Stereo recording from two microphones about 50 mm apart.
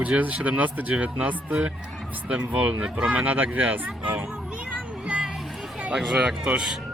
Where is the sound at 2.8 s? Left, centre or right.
Right.